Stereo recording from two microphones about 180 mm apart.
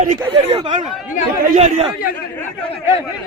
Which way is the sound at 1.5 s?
40° right (ahead or behind).